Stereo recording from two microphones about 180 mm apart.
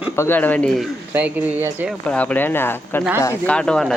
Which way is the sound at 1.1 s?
10° right (ahead or behind).